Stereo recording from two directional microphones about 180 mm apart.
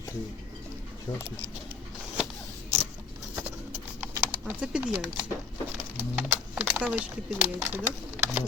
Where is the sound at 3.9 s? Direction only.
10° right (ahead or behind).